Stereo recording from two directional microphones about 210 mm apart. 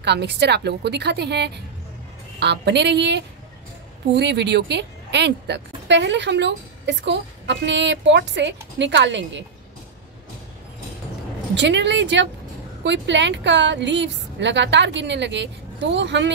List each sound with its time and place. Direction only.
0.0 s a woman's voice: 55° right (ahead or behind)
11.5 s a woman's voice: 55° right (ahead or behind)